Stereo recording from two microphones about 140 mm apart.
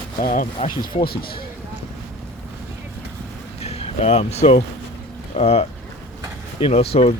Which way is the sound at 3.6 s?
45° left (ahead or behind).